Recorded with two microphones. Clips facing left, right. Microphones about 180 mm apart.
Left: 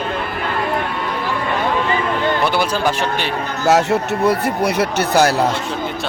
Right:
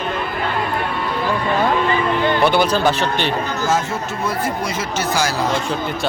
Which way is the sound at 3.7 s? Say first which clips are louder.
Left 9 dB; 70° left (ahead or behind).